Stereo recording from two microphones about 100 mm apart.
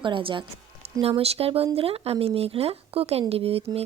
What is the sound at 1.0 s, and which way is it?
Speech, 80° right.